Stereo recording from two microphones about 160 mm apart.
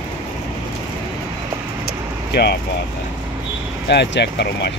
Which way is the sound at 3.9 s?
90° left.